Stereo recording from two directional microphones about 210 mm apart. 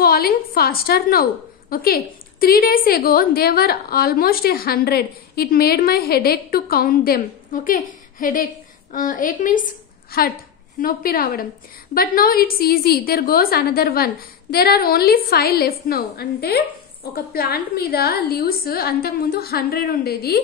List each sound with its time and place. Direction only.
0.0 s a woman's voice: 45° left (ahead or behind)